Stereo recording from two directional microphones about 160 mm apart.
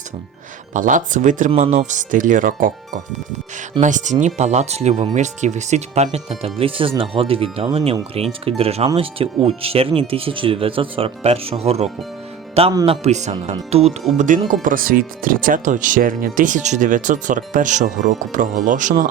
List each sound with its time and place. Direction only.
0.7 s speech: 55° right (ahead or behind)
1.5 s speech: 40° right (ahead or behind)
14.2 s speech: 55° right (ahead or behind)